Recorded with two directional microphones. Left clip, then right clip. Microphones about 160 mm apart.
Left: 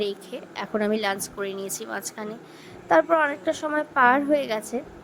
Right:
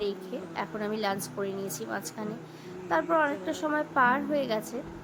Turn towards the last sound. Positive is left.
turn(degrees=40)  # may be behind; listen again after turning